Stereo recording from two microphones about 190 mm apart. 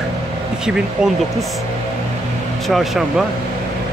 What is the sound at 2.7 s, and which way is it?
Speech, centre (ahead or behind).